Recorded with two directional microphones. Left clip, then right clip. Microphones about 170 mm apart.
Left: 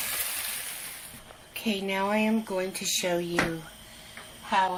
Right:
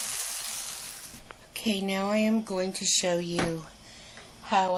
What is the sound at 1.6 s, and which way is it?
Speech, 45° right (ahead or behind).